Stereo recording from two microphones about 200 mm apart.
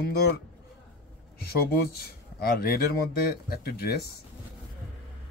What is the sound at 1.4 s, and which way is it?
Speech, 50° left (ahead or behind).